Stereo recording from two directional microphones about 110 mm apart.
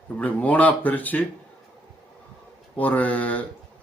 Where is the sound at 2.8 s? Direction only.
15° left (ahead or behind).